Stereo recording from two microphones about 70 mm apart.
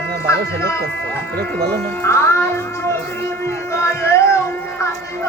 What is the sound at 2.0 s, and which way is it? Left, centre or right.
Speech, left.